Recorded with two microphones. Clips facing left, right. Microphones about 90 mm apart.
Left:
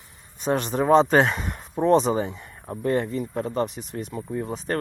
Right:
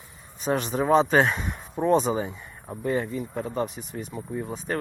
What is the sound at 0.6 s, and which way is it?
Speech, 45° left (ahead or behind).